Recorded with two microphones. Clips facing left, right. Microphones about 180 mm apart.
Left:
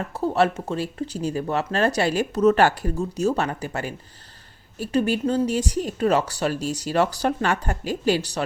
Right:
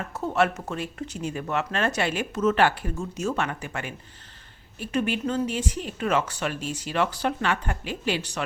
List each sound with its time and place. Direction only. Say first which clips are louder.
0.1 s speech: left 3 dB; 35° left (ahead or behind)